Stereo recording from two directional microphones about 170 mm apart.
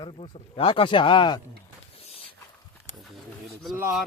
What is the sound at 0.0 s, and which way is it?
Speech, 30° left (ahead or behind).